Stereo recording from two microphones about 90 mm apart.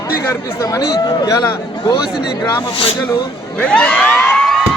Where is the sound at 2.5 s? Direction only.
75° left (ahead or behind).